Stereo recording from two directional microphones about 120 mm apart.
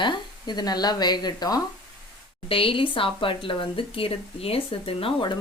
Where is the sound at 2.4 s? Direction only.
50° left (ahead or behind).